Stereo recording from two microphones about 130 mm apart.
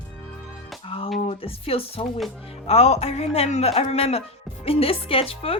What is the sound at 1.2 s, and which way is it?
Speech, 45° left (ahead or behind).